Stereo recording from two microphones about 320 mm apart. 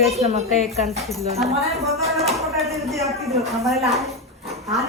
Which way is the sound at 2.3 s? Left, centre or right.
Centre.